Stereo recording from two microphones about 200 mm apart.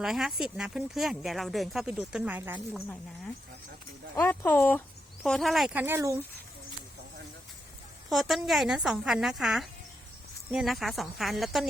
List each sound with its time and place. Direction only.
0.0 s speech: centre (ahead or behind)
4.1 s speech: 10° left (ahead or behind); by 6.1 s 15° right (ahead or behind)
8.1 s speech: centre (ahead or behind)